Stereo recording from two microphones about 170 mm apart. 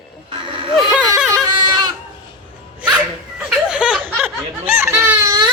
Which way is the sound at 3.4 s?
5° right (ahead or behind).